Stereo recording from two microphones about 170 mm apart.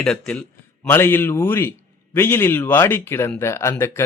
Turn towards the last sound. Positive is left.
turn(degrees=15)  # may be behind; listen again after turning